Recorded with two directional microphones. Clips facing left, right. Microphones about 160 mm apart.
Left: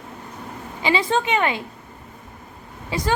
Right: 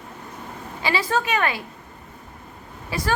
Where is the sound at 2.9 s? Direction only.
20° left (ahead or behind).